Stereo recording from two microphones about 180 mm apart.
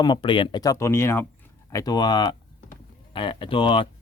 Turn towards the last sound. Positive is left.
turn(degrees=30)  # may be behind; listen again after turning